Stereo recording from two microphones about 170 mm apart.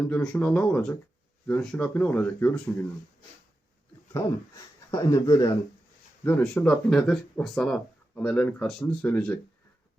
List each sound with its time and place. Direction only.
0.1 s speech: 5° left (ahead or behind)
4.1 s speech: 20° left (ahead or behind)
6.2 s speech: 10° left (ahead or behind)